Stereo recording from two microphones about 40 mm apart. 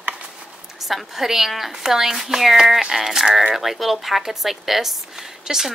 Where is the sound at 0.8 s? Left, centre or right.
Centre.